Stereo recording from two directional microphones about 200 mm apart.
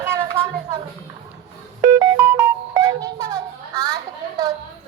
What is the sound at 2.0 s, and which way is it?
Music, 15° right (ahead or behind).